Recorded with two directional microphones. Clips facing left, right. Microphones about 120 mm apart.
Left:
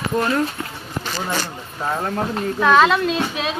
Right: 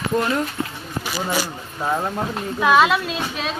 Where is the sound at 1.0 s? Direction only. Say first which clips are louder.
Right 1 dB; 10° right (ahead or behind).